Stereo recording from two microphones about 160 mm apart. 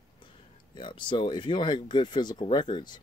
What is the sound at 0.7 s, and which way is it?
Speech, 30° left (ahead or behind).